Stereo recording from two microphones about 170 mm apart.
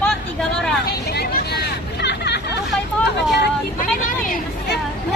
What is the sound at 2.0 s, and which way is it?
Hubbub, 80° left.